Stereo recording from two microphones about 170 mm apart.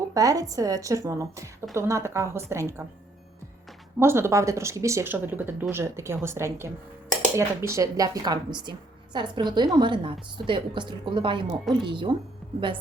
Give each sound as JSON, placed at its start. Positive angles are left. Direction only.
{"t": 0.1, "sound": "a woman's voice", "side_deg": -20}
{"t": 4.0, "sound": "a woman's voice", "side_deg": -15}